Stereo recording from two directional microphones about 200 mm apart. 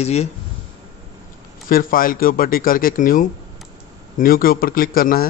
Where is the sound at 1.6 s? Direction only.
45° left (ahead or behind).